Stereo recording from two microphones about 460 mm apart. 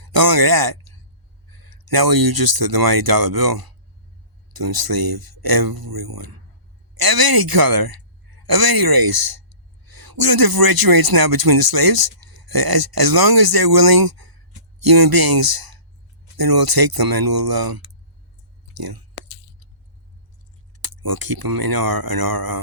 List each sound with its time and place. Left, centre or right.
0.0 s speech: right
20.8 s speech: right